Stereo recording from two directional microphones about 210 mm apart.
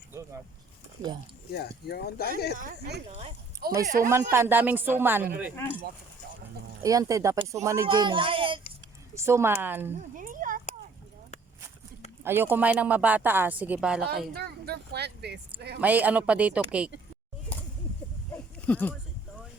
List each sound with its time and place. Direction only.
0.1 s vehicle: 15° right (ahead or behind)
1.5 s speech: 50° left (ahead or behind)
2.6 s speech: 45° right (ahead or behind)
3.1 s speech: 30° right (ahead or behind)
3.8 s speech: 40° right (ahead or behind)
4.1 s a woman's voice: 10° right (ahead or behind)
6.8 s a woman's voice: 15° right (ahead or behind)
9.1 s a woman's voice: 15° right (ahead or behind)
9.9 s speech: 35° right (ahead or behind)
12.2 s a woman's voice: 10° right (ahead or behind)
14.3 s speech: 50° right (ahead or behind)
15.8 s a woman's voice: 5° right (ahead or behind)
18.6 s speech: 10° left (ahead or behind)